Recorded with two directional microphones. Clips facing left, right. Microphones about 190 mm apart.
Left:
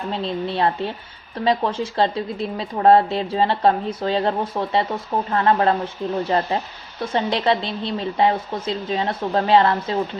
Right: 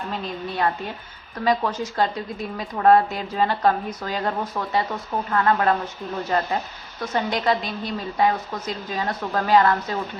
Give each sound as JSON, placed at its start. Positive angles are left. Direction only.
{"t": 0.1, "sound": "a woman's voice", "side_deg": 30}